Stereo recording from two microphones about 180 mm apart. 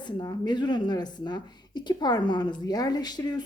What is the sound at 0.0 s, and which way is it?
Speech, 25° left (ahead or behind).